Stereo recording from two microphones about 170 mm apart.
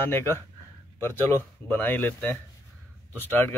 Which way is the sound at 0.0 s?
15° left (ahead or behind).